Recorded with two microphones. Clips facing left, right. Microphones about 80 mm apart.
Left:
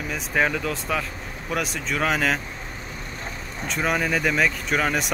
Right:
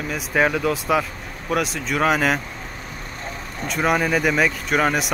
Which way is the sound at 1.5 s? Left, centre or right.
Centre.